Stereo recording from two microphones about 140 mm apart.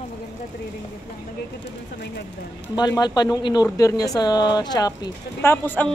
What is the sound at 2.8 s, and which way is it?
Speech, 30° left (ahead or behind).